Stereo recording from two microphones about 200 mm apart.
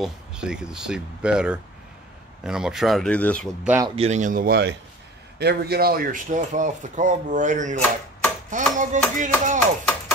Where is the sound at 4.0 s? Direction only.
35° right (ahead or behind).